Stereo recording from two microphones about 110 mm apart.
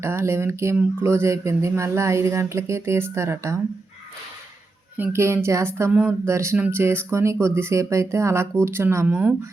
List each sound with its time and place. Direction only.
0.0 s speech: 25° right (ahead or behind)
4.9 s speech: 20° right (ahead or behind)